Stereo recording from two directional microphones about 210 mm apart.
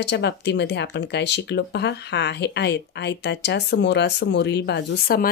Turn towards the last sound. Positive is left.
turn(degrees=50)  # may be behind; listen again after turning